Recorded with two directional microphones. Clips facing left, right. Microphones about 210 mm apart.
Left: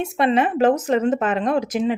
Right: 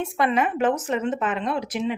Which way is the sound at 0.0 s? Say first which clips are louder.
Left 4 dB; 25° left (ahead or behind).